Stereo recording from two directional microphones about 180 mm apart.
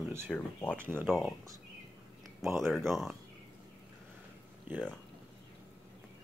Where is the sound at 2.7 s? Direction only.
Centre (ahead or behind).